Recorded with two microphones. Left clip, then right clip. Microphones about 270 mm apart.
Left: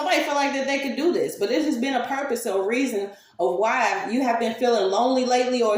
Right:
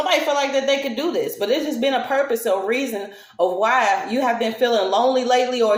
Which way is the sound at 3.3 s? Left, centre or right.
Right.